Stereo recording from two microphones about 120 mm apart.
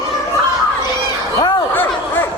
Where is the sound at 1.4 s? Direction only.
35° left (ahead or behind).